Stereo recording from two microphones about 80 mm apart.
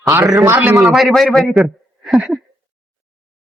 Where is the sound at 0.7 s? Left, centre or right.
Centre.